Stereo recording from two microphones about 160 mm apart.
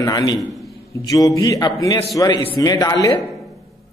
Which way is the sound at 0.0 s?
25° left (ahead or behind).